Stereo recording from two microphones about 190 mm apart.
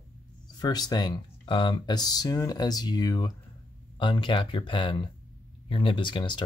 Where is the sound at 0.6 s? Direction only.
20° left (ahead or behind).